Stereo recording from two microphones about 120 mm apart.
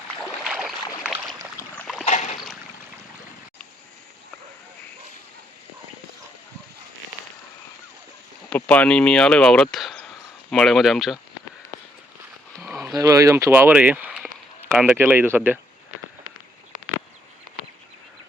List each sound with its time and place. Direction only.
0.2 s boat: 5° right (ahead or behind)
1.5 s boat: 15° left (ahead or behind)
2.0 s boat: 75° left (ahead or behind)
8.4 s speech: 10° left (ahead or behind)
12.9 s speech: 30° right (ahead or behind); by 14.9 s 5° right (ahead or behind)
14.9 s speech: 15° right (ahead or behind)